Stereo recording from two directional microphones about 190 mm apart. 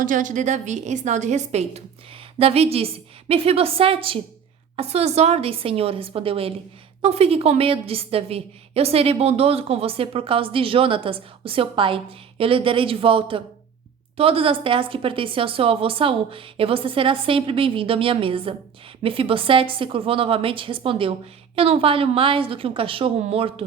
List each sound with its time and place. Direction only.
0.0 s a woman's voice: 45° right (ahead or behind)